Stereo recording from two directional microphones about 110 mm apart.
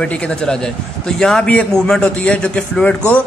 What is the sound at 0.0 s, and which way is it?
A man's voice, 10° left (ahead or behind).